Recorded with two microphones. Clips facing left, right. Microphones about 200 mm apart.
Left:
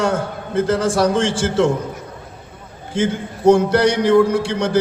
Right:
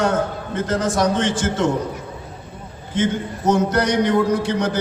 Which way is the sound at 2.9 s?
30° left (ahead or behind).